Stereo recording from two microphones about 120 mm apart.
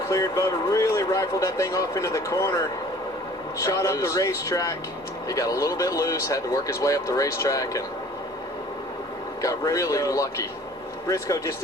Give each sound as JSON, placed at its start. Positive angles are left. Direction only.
{"t": 0.1, "sound": "speech", "side_deg": 25}
{"t": 9.4, "sound": "speech", "side_deg": 25}